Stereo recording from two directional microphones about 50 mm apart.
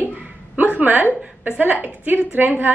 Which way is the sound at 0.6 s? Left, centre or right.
Right.